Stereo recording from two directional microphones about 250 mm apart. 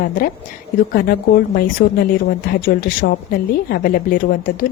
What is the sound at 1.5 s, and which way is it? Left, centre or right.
Speech, left.